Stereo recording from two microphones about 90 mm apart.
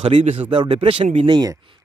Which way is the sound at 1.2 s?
50° right (ahead or behind).